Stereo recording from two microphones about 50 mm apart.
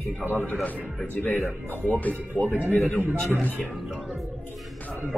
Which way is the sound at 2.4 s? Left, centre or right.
Right.